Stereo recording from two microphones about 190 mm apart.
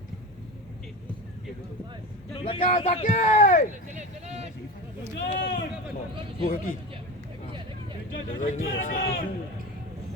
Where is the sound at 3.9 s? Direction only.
35° right (ahead or behind).